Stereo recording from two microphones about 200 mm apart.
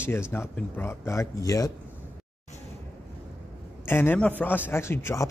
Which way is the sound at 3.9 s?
10° left (ahead or behind).